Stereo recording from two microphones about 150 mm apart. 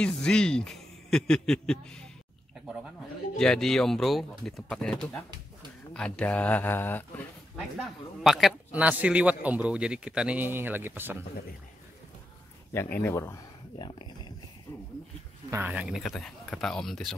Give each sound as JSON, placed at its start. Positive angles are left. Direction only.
{"t": 0.0, "sound": "a man's voice", "side_deg": 5}
{"t": 3.3, "sound": "a man's voice", "side_deg": 5}
{"t": 7.8, "sound": "a man's voice", "side_deg": 0}
{"t": 13.0, "sound": "speech", "side_deg": 20}
{"t": 13.8, "sound": "speech", "side_deg": 35}
{"t": 15.5, "sound": "a man's voice", "side_deg": -10}